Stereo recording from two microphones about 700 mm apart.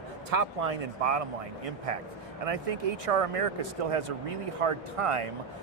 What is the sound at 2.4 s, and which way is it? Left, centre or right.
A man's voice, right.